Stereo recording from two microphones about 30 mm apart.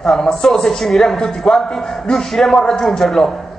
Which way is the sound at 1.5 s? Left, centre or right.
Left.